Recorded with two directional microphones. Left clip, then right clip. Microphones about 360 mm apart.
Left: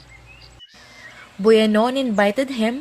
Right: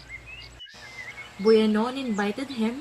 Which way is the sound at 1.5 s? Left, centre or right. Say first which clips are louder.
Left 6 dB; left.